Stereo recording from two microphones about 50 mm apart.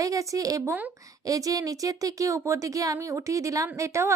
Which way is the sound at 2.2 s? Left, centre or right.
Right.